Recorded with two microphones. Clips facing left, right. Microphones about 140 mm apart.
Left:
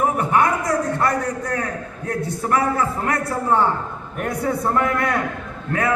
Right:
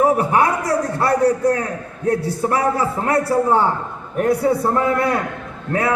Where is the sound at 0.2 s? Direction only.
30° right (ahead or behind).